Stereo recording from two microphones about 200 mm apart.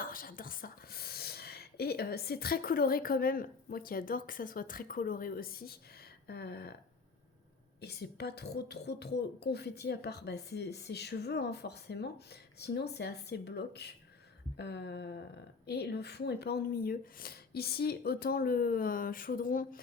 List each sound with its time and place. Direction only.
0.0 s speech: 45° left (ahead or behind)
7.8 s speech: 55° left (ahead or behind)